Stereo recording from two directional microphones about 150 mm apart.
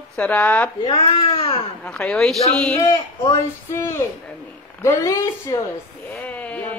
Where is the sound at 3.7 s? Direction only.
15° left (ahead or behind).